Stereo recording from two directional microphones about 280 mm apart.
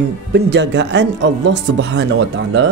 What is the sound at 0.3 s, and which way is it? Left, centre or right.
Speech, right.